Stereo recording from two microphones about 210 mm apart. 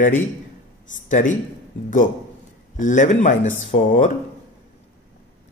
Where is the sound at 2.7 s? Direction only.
35° left (ahead or behind).